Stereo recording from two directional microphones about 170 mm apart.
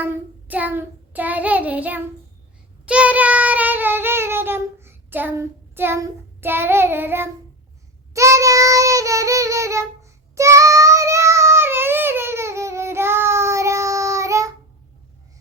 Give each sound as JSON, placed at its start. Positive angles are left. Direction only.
{"t": 0.0, "sound": "child singing", "side_deg": -10}